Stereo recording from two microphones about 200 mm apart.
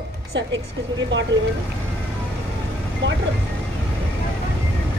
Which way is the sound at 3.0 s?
65° right (ahead or behind).